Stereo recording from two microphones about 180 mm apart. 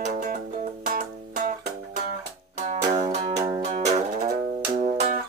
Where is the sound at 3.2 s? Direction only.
25° right (ahead or behind).